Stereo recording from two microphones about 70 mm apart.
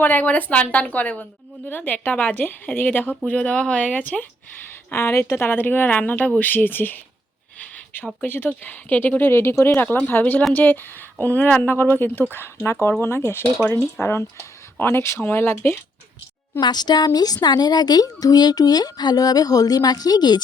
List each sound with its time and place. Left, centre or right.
0.0 s speech: left
9.3 s speech: left
16.6 s speech: left